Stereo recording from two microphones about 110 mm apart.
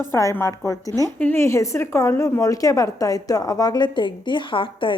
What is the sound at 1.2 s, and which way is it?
A woman's voice, 20° left (ahead or behind).